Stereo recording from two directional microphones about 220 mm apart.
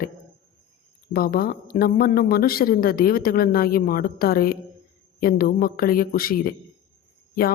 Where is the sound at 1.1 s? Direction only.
45° left (ahead or behind).